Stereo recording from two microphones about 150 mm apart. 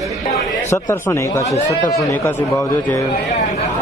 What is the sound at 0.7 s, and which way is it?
Speech, 20° left (ahead or behind).